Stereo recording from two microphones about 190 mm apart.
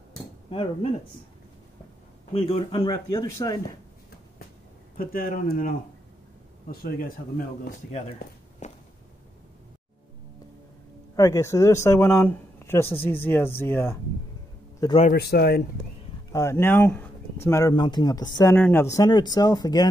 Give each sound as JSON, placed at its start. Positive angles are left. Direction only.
{"t": 2.3, "sound": "speech", "side_deg": 30}
{"t": 4.9, "sound": "speech", "side_deg": 50}
{"t": 8.2, "sound": "walk", "side_deg": 40}
{"t": 11.1, "sound": "speech", "side_deg": 15}
{"t": 15.0, "sound": "speech", "side_deg": 50}
{"t": 16.3, "sound": "speech", "side_deg": 15}